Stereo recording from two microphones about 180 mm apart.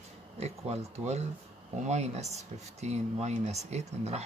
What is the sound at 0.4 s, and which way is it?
Speech, 35° right (ahead or behind).